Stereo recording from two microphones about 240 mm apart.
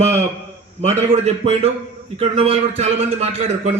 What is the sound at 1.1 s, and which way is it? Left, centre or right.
A man's voice, right.